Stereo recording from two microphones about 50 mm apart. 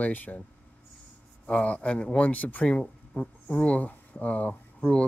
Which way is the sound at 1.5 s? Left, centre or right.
Left.